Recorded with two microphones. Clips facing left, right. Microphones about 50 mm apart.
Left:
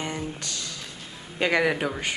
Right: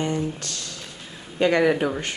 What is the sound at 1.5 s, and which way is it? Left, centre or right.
Speech, centre.